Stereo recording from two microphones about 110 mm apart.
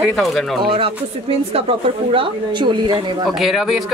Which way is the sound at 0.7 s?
55° right (ahead or behind).